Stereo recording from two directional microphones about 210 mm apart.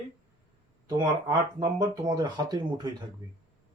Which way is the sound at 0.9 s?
20° right (ahead or behind).